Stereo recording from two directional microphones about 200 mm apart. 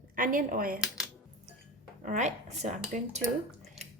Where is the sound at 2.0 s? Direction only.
35° right (ahead or behind).